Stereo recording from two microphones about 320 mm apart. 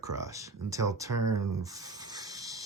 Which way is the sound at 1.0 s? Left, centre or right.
Right.